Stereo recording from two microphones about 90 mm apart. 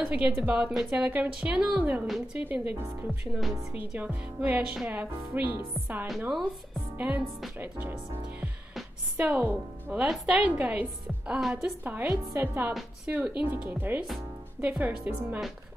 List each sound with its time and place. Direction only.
0.0 s a woman's voice: 15° right (ahead or behind)
2.0 s a woman's voice: 5° right (ahead or behind)
2.4 s a woman's voice: 20° right (ahead or behind)
9.1 s a woman's voice: 20° right (ahead or behind)
10.0 s a woman's voice: 5° right (ahead or behind)
12.1 s speech: 25° right (ahead or behind)
13.0 s a woman's voice: 15° right (ahead or behind)